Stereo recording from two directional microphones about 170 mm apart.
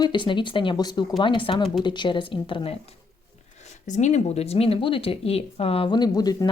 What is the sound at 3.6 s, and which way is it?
Speech, 45° left (ahead or behind).